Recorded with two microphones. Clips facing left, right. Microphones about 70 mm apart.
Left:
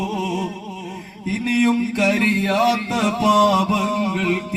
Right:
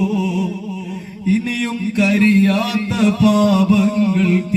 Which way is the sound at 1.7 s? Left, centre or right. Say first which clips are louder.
Right 1 dB; left.